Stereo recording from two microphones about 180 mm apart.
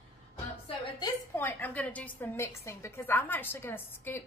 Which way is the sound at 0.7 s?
25° left (ahead or behind).